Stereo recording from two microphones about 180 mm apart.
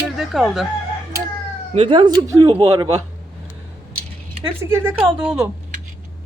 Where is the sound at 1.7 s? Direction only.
30° right (ahead or behind).